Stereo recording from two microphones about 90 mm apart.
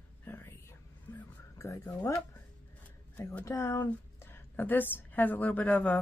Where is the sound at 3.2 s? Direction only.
20° left (ahead or behind).